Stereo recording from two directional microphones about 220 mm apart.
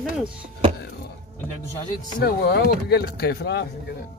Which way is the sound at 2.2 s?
45° left (ahead or behind).